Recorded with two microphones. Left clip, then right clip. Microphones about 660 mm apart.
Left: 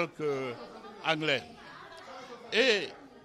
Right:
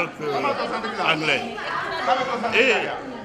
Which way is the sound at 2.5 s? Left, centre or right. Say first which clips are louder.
Right 7 dB; left.